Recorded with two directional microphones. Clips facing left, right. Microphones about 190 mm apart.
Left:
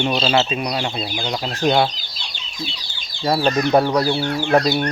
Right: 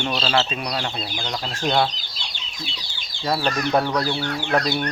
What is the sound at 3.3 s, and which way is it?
Speech, 25° left (ahead or behind).